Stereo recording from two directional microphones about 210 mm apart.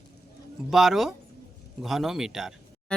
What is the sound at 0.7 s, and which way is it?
Speech, centre (ahead or behind).